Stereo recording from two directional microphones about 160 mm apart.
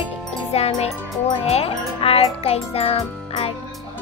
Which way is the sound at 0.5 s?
40° left (ahead or behind).